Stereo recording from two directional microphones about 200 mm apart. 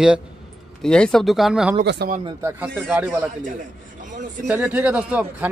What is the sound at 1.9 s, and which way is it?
Speech, 55° right (ahead or behind).